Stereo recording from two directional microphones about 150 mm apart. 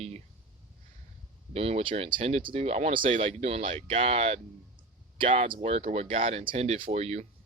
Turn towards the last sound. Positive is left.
turn(degrees=-45)  # may be behind; listen again after turning